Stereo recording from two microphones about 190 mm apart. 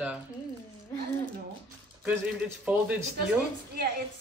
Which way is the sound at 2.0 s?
5° right (ahead or behind).